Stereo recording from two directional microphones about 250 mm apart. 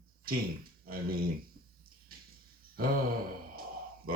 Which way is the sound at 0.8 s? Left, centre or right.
Right.